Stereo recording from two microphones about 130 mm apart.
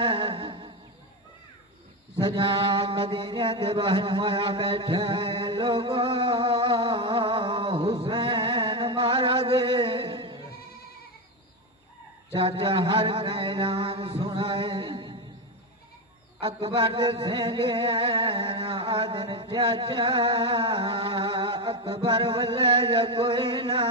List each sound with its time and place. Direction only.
0.0 s humming: 40° right (ahead or behind)
2.1 s mantra: 40° right (ahead or behind)
12.3 s mantra: 45° right (ahead or behind)
16.3 s a sound: 45° right (ahead or behind)